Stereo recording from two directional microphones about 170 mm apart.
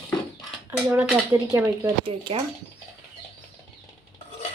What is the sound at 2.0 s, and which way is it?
Speech, 30° right (ahead or behind).